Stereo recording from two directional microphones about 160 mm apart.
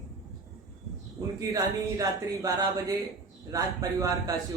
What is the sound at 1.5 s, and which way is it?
Speech, 20° right (ahead or behind).